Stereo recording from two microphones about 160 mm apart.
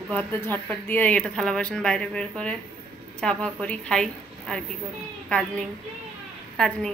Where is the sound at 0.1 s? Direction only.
10° left (ahead or behind).